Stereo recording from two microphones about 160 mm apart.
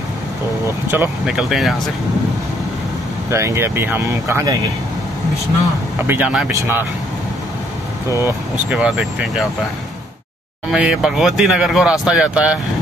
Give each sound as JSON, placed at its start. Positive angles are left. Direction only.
{"t": 0.8, "sound": "speech", "side_deg": -10}
{"t": 3.3, "sound": "speech", "side_deg": -15}
{"t": 6.0, "sound": "speech", "side_deg": -10}
{"t": 8.2, "sound": "speech", "side_deg": -5}
{"t": 10.7, "sound": "speech", "side_deg": -5}